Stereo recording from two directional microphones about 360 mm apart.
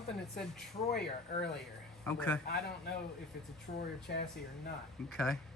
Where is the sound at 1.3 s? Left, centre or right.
Left.